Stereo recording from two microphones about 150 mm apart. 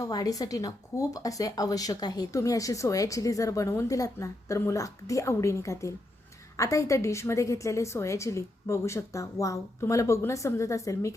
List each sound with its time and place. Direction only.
0.0 s speech: 25° left (ahead or behind)